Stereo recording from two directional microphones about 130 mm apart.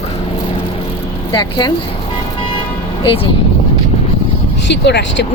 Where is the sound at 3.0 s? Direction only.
45° left (ahead or behind).